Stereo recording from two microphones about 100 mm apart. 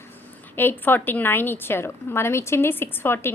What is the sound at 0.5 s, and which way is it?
A woman's voice, 20° left (ahead or behind).